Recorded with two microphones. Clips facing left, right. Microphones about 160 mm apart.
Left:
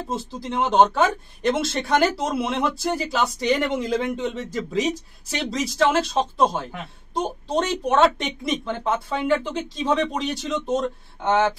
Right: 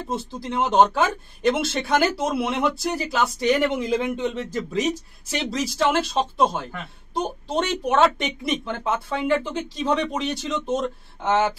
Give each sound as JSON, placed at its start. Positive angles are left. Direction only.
{"t": 0.0, "sound": "speech", "side_deg": 0}